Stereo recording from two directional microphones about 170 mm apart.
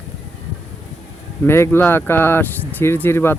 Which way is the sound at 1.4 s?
15° left (ahead or behind).